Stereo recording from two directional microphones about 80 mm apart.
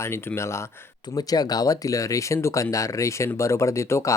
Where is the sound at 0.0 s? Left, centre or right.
Left.